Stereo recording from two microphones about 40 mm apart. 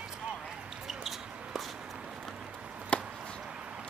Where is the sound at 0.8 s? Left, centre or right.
Centre.